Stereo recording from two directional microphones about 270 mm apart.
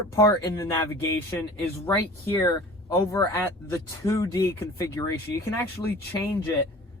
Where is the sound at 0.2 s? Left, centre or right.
Centre.